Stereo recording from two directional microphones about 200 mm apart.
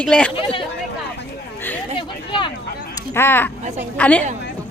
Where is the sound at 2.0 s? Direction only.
25° left (ahead or behind).